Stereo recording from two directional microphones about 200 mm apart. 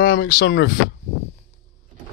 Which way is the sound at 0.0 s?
65° left (ahead or behind).